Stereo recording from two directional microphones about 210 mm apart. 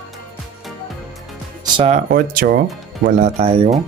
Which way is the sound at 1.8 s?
30° right (ahead or behind).